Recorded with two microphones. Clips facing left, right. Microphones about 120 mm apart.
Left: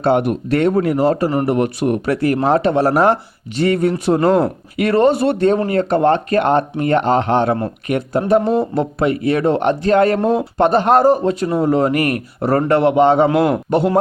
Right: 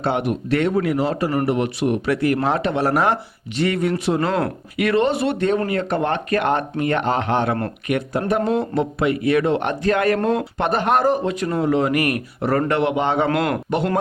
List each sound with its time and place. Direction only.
0.0 s speech: 45° left (ahead or behind)
10.2 s speech: 10° left (ahead or behind)
10.6 s speech: 30° left (ahead or behind)